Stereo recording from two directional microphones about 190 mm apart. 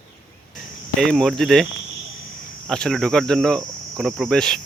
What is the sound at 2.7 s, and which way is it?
Speech, centre (ahead or behind).